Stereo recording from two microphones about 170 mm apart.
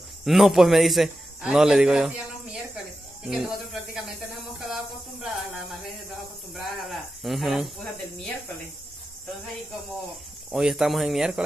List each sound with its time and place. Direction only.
0.2 s a man's voice: centre (ahead or behind)
5.2 s speech: centre (ahead or behind)
10.5 s speech: 5° right (ahead or behind)